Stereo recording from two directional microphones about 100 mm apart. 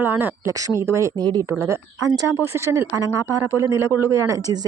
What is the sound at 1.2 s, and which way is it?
Speech, 45° right (ahead or behind).